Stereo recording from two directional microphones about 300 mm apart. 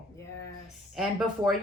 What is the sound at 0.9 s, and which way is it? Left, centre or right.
Speech, centre.